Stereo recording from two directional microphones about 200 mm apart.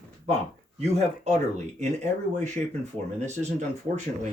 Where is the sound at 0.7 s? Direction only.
35° right (ahead or behind).